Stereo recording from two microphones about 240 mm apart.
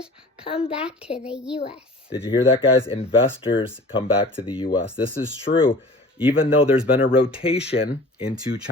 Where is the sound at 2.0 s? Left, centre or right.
Left.